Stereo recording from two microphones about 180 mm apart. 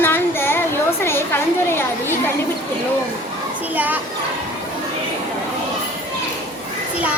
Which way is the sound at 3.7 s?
10° right (ahead or behind).